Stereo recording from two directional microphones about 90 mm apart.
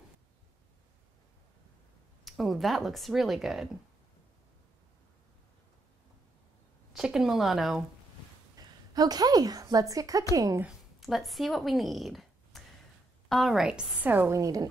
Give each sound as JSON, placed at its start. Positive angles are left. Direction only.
{"t": 2.2, "sound": "speech", "side_deg": 0}
{"t": 6.9, "sound": "speech", "side_deg": -5}
{"t": 8.5, "sound": "a woman's voice", "side_deg": -45}
{"t": 11.0, "sound": "a woman's voice", "side_deg": 0}
{"t": 14.3, "sound": "a woman's voice", "side_deg": -40}